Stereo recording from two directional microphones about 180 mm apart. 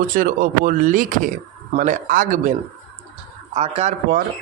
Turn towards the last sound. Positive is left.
turn(degrees=-40)  # may be behind; listen again after turning